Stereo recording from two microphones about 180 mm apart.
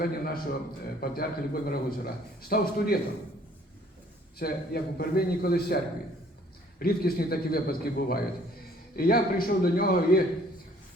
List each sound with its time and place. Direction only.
0.0 s a man's voice: 55° left (ahead or behind)
4.4 s a man's voice: 60° left (ahead or behind)
6.7 s a man's voice: 55° left (ahead or behind)